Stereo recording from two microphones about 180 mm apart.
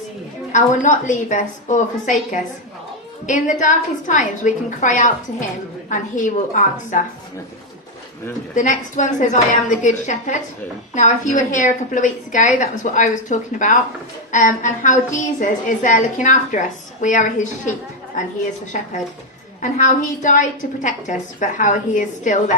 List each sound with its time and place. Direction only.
0.5 s a woman's voice: 45° left (ahead or behind)
8.5 s a woman's voice: 45° left (ahead or behind)